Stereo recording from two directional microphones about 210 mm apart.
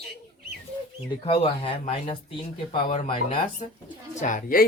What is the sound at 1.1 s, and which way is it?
Speech, 25° left (ahead or behind).